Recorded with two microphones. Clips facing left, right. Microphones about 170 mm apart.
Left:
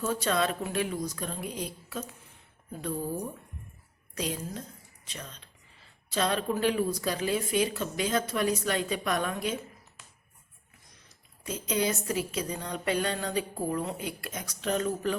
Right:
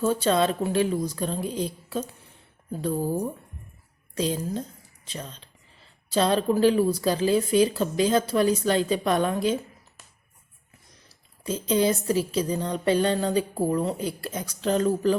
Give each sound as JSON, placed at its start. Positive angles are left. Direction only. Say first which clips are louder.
{"t": 0.0, "sound": "a woman's voice", "louder": "right 6 dB", "side_deg": -30}
{"t": 11.1, "sound": "speech", "louder": "right 7 dB", "side_deg": -30}